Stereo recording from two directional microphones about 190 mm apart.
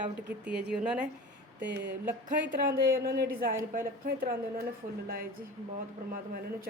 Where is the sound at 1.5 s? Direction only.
65° right (ahead or behind).